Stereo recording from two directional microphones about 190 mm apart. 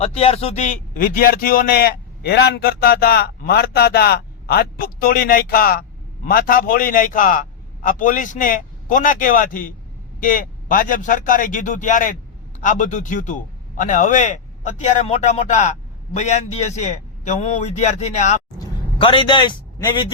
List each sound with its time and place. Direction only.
0.0 s a man's voice: 30° left (ahead or behind)
18.6 s a man's voice: 25° left (ahead or behind)